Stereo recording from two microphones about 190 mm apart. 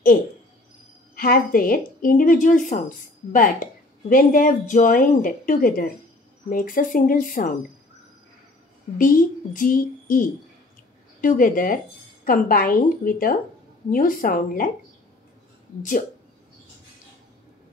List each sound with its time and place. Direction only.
1.1 s a woman's voice: 50° left (ahead or behind)
8.9 s a woman's voice: 45° left (ahead or behind)